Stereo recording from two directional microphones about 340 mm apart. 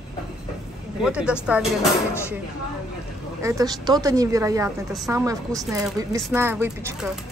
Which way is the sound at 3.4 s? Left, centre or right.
Centre.